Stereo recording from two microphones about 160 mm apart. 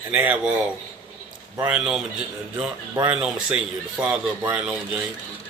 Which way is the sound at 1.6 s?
5° right (ahead or behind).